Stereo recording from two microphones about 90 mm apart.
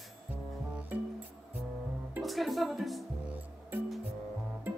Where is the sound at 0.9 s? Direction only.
20° right (ahead or behind).